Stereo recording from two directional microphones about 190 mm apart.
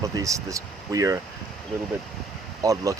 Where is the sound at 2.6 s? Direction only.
15° right (ahead or behind).